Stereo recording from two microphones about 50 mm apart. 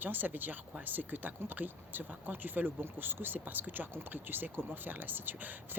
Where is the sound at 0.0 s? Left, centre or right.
Right.